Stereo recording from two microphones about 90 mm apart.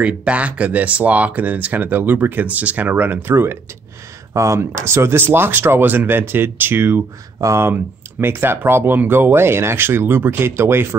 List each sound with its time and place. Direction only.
0.0 s speech: 15° right (ahead or behind)
7.3 s speech: 35° right (ahead or behind)